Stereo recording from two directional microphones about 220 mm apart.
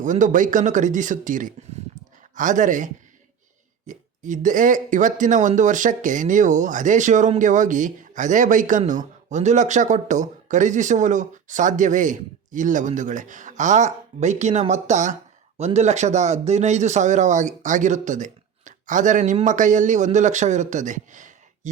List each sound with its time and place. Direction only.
0.0 s speech: 35° right (ahead or behind)